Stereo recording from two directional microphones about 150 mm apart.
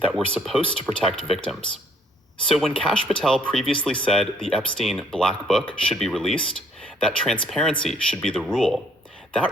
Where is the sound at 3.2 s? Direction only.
5° left (ahead or behind).